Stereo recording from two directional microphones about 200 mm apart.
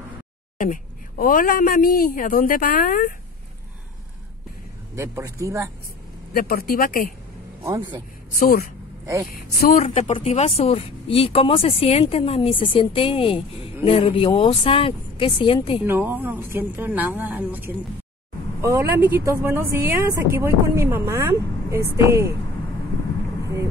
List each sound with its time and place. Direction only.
0.6 s a woman's voice: 45° left (ahead or behind)
4.9 s speech: 15° right (ahead or behind)
6.3 s a woman's voice: 50° left (ahead or behind)
7.6 s speech: 20° right (ahead or behind)
8.4 s a woman's voice: 45° left (ahead or behind); by 15.8 s 25° left (ahead or behind)
15.8 s speech: 10° right (ahead or behind)